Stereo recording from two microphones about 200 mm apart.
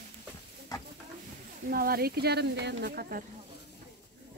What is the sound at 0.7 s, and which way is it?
Stir, 15° left (ahead or behind).